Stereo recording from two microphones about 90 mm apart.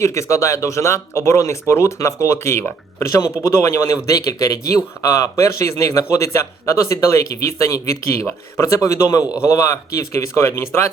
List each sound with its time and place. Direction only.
0.0 s speech: 35° left (ahead or behind)
9.2 s a man's voice: 15° right (ahead or behind)
9.5 s speech: 40° left (ahead or behind)